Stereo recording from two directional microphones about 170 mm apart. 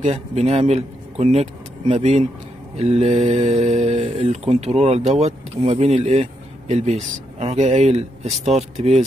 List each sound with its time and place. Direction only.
0.0 s speech: 40° right (ahead or behind)